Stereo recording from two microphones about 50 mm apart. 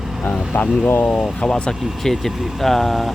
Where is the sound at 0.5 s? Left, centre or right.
Left.